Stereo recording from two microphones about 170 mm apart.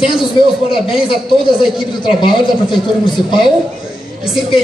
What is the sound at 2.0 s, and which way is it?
Speech, 25° left (ahead or behind).